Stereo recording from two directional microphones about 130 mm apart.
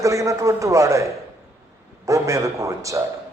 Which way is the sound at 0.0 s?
25° right (ahead or behind).